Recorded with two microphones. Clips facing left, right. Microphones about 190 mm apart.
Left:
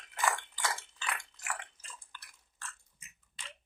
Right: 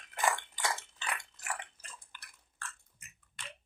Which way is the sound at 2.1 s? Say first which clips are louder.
Left 2 dB; 15° right (ahead or behind).